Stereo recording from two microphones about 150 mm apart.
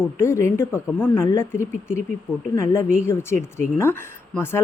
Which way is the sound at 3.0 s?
15° left (ahead or behind).